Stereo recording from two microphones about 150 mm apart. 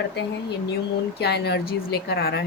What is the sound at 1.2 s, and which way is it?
Speech, 90° left.